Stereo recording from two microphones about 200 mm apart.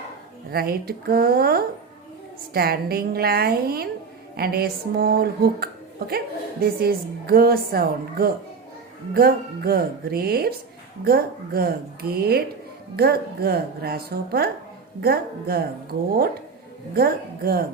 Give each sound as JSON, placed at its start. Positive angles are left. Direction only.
{"t": 0.5, "sound": "a woman's voice", "side_deg": -50}
{"t": 16.9, "sound": "a woman's voice", "side_deg": -50}